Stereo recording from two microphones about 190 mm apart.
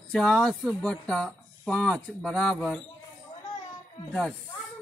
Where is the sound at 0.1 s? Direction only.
Centre (ahead or behind).